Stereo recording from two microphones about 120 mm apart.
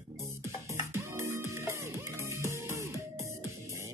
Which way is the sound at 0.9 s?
20° right (ahead or behind).